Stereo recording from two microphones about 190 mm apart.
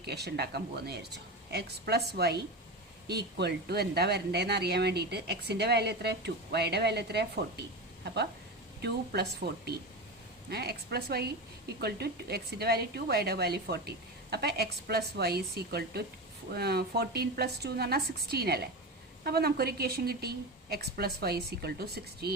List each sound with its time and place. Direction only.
0.0 s a woman's voice: 60° right (ahead or behind)
9.4 s speech: 55° right (ahead or behind)